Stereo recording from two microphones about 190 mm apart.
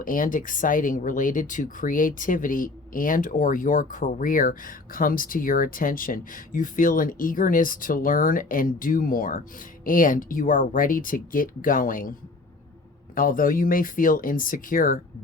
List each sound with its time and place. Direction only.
0.0 s speech: 45° left (ahead or behind)
13.1 s speech: 45° left (ahead or behind)